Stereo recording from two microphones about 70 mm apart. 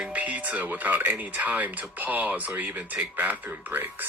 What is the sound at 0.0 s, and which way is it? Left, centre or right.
Speech, right.